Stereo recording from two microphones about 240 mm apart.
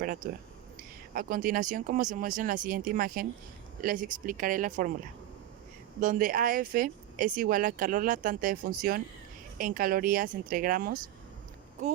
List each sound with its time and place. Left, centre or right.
0.0 s speech: right
6.0 s speech: right
9.6 s speech: right